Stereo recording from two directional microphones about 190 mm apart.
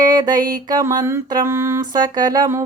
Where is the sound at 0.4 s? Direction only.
20° right (ahead or behind).